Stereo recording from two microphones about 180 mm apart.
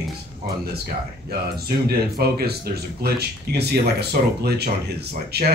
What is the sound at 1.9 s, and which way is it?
Speech, 60° right (ahead or behind).